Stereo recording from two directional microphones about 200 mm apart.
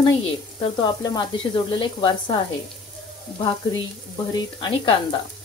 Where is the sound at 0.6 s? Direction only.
20° left (ahead or behind).